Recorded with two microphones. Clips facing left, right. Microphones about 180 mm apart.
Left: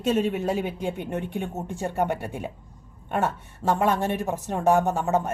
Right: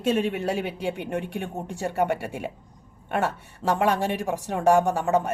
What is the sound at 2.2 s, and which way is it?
Speech, 10° right (ahead or behind).